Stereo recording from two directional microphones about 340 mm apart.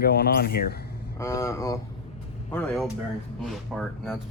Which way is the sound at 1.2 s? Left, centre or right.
Centre.